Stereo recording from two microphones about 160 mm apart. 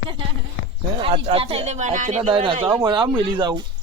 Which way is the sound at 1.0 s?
35° right (ahead or behind).